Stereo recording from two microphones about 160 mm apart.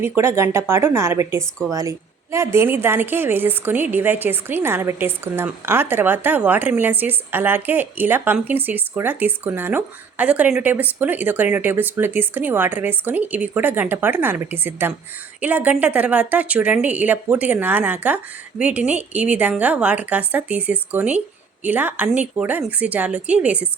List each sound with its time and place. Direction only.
0.2 s a woman's voice: 15° right (ahead or behind)